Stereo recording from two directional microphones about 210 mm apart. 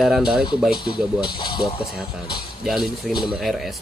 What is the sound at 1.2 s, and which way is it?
Speech, 20° left (ahead or behind).